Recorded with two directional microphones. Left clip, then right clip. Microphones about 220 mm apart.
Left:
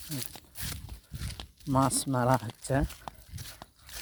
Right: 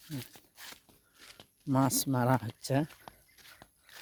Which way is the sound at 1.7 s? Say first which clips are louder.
Left 2 dB; 15° right (ahead or behind).